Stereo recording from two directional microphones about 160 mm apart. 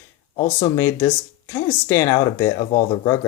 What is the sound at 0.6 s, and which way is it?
Speech, 15° left (ahead or behind).